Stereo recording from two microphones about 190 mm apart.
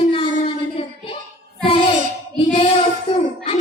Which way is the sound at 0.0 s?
30° left (ahead or behind).